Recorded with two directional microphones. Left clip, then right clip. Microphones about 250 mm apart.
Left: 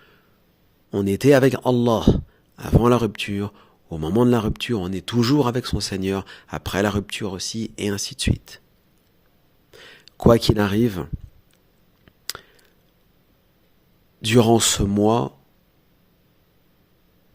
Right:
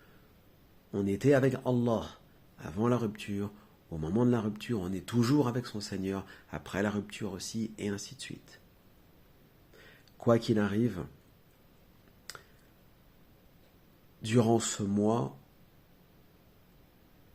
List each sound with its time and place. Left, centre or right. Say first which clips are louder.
0.9 s a man's voice: left 11 dB; left
9.7 s speech: left 14 dB; left
12.3 s a sound: left 11 dB; left
14.2 s speech: left 11 dB; left